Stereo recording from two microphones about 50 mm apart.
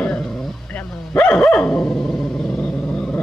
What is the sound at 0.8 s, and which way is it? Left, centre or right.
Bow-wow, centre.